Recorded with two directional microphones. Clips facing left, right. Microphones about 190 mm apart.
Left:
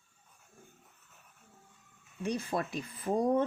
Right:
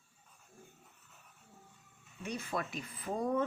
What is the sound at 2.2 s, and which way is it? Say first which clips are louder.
Speech: left 5 dB; 35° left (ahead or behind).